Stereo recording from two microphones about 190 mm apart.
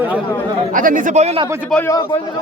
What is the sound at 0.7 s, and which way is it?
Speech, 45° right (ahead or behind).